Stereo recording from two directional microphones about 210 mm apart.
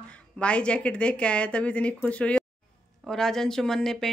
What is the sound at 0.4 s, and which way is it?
Speech, 5° left (ahead or behind).